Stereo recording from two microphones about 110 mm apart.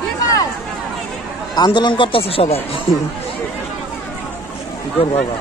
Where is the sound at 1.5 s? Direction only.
40° left (ahead or behind); by 2.5 s 60° left (ahead or behind).